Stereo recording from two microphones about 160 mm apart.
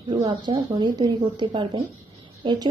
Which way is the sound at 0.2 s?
35° right (ahead or behind).